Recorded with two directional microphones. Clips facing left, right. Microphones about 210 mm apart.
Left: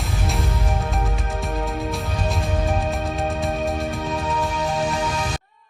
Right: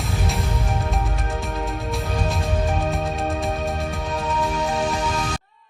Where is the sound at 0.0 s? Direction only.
Centre (ahead or behind).